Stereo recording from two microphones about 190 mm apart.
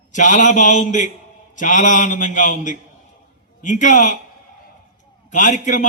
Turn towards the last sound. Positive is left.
turn(degrees=40)  # may be behind; listen again after turning